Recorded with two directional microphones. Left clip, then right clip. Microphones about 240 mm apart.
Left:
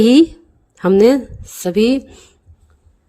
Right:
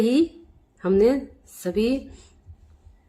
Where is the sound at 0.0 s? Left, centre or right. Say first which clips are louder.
Left 10 dB; left.